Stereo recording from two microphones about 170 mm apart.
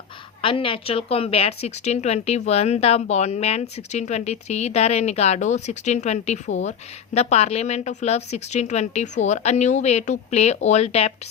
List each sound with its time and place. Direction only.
0.4 s speech: 30° left (ahead or behind)